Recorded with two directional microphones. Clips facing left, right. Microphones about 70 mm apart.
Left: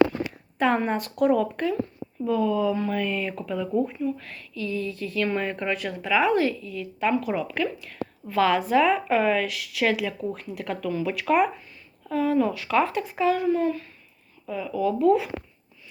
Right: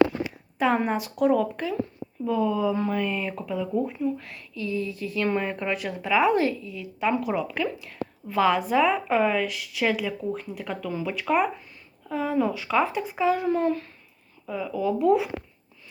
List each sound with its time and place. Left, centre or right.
0.6 s a woman's voice: centre
2.2 s speech: centre
4.5 s a woman's voice: right
7.1 s speech: centre
8.3 s a woman's voice: centre
13.2 s a woman's voice: right
13.5 s a child's voice: right
14.4 s speech: centre
14.7 s a woman's voice: right